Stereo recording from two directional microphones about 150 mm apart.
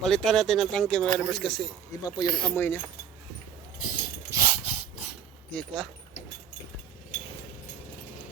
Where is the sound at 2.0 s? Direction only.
30° left (ahead or behind).